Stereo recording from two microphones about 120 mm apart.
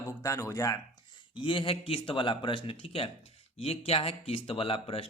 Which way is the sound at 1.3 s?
45° left (ahead or behind).